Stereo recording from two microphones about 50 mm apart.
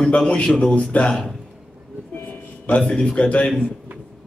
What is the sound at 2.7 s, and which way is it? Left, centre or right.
Speech, left.